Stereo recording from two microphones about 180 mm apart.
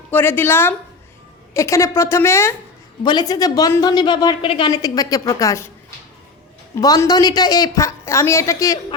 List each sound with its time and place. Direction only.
0.1 s a woman's voice: 10° left (ahead or behind)
6.7 s a woman's voice: 20° left (ahead or behind)